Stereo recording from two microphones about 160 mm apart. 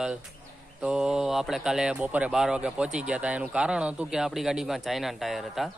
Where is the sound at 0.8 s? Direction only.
5° right (ahead or behind).